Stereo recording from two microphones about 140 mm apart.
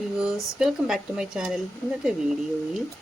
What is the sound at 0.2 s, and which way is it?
A woman's voice, 5° right (ahead or behind).